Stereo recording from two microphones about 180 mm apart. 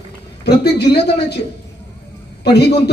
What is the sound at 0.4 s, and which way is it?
Speech, 65° left (ahead or behind).